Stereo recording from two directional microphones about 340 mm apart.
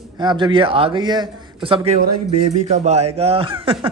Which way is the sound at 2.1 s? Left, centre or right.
Right.